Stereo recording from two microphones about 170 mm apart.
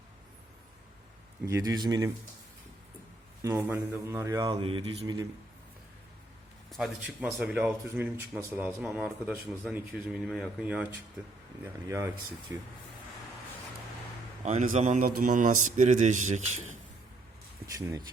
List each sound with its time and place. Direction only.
1.5 s speech: 20° right (ahead or behind)
3.4 s a man's voice: 15° right (ahead or behind)
4.6 s speech: 35° right (ahead or behind)
6.7 s a man's voice: centre (ahead or behind)
11.6 s speech: 20° right (ahead or behind)
14.4 s a man's voice: 45° right (ahead or behind)
17.7 s speech: 20° right (ahead or behind)